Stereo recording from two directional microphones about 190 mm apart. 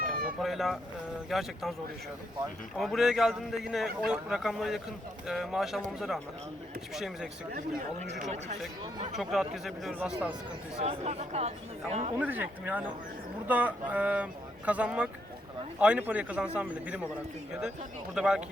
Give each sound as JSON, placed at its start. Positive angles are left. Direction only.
{"t": 0.0, "sound": "a sound", "side_deg": -50}
{"t": 0.4, "sound": "a man's voice", "side_deg": 0}
{"t": 2.7, "sound": "a man's voice", "side_deg": 0}
{"t": 8.2, "sound": "speech", "side_deg": -40}
{"t": 9.1, "sound": "a man's voice", "side_deg": 0}
{"t": 10.8, "sound": "speech", "side_deg": -35}
{"t": 12.2, "sound": "speech", "side_deg": -10}
{"t": 18.1, "sound": "a man's voice", "side_deg": -5}